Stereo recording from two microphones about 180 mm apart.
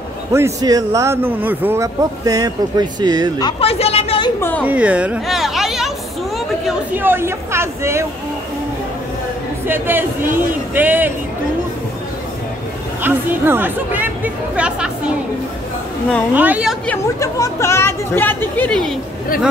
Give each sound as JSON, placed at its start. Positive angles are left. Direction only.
{"t": 0.3, "sound": "a man's voice", "side_deg": -15}
{"t": 3.3, "sound": "speech", "side_deg": 25}
{"t": 4.4, "sound": "speech", "side_deg": 10}
{"t": 4.6, "sound": "a man's voice", "side_deg": -5}
{"t": 9.7, "sound": "a man's voice", "side_deg": -10}
{"t": 13.0, "sound": "a man's voice", "side_deg": -10}
{"t": 16.3, "sound": "a man's voice", "side_deg": -10}
{"t": 16.8, "sound": "speech", "side_deg": 15}